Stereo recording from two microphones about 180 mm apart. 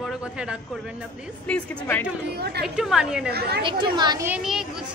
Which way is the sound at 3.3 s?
65° right (ahead or behind).